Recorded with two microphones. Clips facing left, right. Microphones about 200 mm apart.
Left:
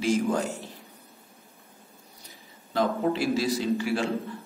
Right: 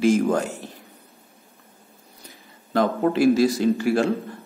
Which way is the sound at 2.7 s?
55° right (ahead or behind).